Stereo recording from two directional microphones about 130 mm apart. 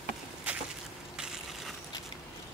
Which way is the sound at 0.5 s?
10° right (ahead or behind).